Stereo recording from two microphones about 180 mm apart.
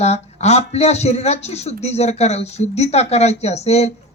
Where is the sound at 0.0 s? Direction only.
35° left (ahead or behind).